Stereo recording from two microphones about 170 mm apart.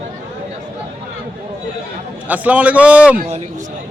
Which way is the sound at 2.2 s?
10° right (ahead or behind).